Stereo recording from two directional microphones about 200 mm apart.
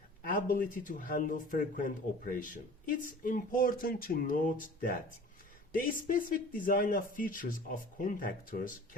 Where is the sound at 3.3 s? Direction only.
45° left (ahead or behind).